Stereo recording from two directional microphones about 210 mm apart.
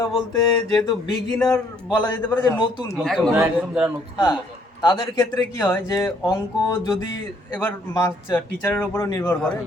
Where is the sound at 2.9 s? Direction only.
Centre (ahead or behind).